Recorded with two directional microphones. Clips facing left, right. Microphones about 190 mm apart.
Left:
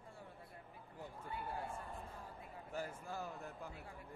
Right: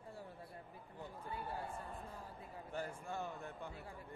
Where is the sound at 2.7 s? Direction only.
5° left (ahead or behind).